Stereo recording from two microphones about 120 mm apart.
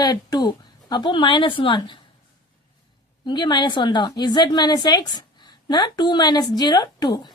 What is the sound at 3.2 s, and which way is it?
A woman's voice, 40° left (ahead or behind).